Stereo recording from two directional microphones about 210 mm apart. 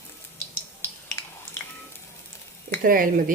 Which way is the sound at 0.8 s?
10° left (ahead or behind).